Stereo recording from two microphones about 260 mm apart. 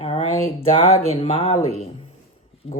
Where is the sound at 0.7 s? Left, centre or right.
Left.